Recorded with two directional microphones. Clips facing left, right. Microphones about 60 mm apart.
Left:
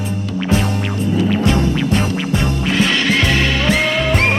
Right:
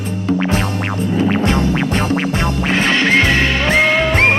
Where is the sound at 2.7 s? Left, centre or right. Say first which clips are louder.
Right 2 dB; right.